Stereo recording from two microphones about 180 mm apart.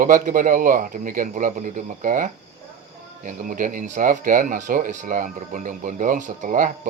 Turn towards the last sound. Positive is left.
turn(degrees=-50)  # may be behind; listen again after turning